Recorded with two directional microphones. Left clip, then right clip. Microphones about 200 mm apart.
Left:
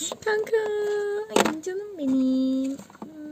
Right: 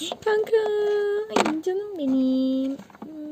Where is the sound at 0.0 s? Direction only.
Centre (ahead or behind).